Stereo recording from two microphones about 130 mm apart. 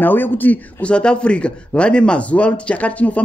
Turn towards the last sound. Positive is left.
turn(degrees=10)  # may be behind; listen again after turning